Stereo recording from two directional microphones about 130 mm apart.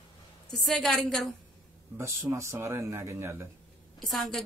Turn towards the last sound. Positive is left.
turn(degrees=0)  # may be behind; listen again after turning